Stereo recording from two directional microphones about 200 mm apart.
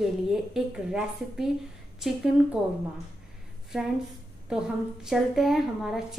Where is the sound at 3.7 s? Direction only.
5° right (ahead or behind).